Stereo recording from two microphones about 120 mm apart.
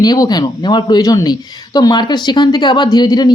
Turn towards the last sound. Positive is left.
turn(degrees=35)  # may be behind; listen again after turning